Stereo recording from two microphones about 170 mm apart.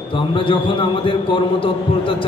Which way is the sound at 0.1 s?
30° left (ahead or behind).